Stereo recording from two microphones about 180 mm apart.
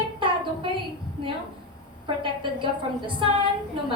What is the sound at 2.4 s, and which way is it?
Speech, 25° right (ahead or behind).